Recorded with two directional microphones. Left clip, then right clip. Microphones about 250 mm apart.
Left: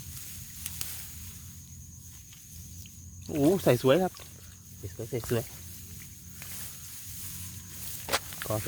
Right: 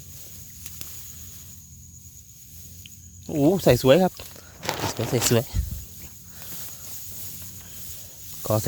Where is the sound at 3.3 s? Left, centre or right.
Centre.